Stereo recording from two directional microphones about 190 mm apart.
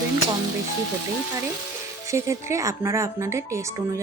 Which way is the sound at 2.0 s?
15° right (ahead or behind).